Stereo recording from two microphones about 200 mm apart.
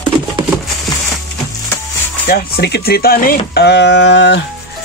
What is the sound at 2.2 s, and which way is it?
Speech, 50° left (ahead or behind).